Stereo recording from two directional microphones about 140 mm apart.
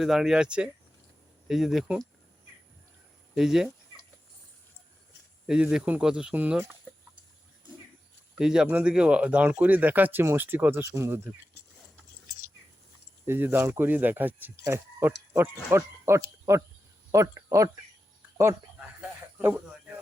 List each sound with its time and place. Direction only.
0.0 s speech: centre (ahead or behind)
3.3 s speech: 5° right (ahead or behind)
5.5 s speech: 5° right (ahead or behind)
8.4 s speech: 5° right (ahead or behind)
13.2 s speech: 15° right (ahead or behind)
19.4 s speech: 15° right (ahead or behind)